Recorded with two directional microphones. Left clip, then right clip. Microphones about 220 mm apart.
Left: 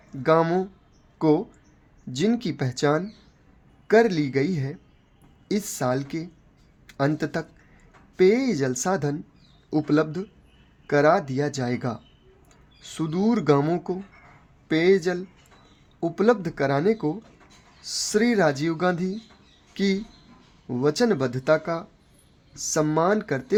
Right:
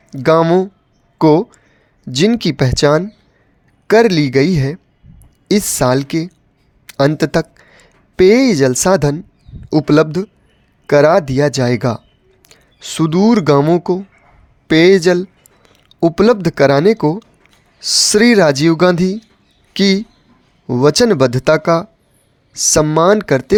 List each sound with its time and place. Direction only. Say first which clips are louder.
0.1 s speech: right 10 dB; 45° right (ahead or behind)